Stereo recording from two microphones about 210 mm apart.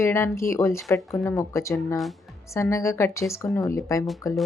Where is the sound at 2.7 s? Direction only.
15° left (ahead or behind).